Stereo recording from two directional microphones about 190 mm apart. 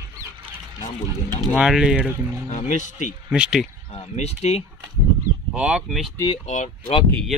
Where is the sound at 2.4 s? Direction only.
40° left (ahead or behind).